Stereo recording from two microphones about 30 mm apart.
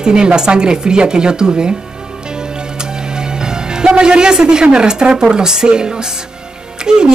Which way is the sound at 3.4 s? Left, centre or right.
Right.